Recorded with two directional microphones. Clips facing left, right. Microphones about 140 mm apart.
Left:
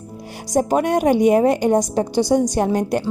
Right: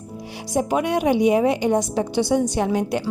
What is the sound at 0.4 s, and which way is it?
Speech, 40° left (ahead or behind).